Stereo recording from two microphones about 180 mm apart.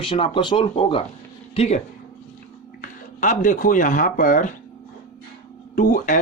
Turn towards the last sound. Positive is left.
turn(degrees=45)  # may be behind; listen again after turning